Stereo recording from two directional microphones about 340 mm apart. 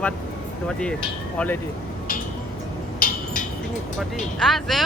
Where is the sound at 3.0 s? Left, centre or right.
Left.